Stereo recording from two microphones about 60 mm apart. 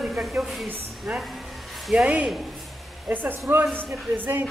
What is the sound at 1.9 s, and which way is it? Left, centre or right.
Speech, right.